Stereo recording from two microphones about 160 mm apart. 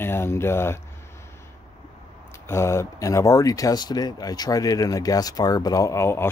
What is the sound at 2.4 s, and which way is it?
Speech, 15° left (ahead or behind).